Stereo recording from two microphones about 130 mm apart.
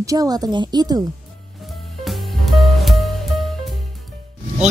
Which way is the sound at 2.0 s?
Centre (ahead or behind).